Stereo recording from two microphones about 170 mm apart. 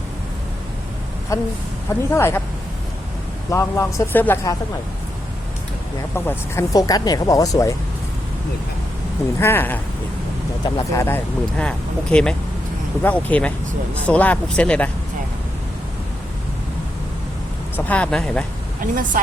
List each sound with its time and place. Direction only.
1.3 s speech: 20° left (ahead or behind)
3.5 s speech: 15° left (ahead or behind)
6.1 s speech: 15° left (ahead or behind)
9.4 s speech: 15° left (ahead or behind)
17.7 s speech: 10° left (ahead or behind)
18.8 s speech: 55° right (ahead or behind)